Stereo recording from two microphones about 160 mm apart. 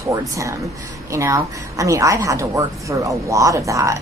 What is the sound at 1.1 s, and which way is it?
A woman's voice, 20° right (ahead or behind).